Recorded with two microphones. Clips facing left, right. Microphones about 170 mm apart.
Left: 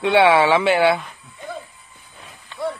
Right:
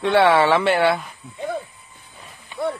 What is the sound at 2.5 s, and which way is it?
Run, 10° right (ahead or behind).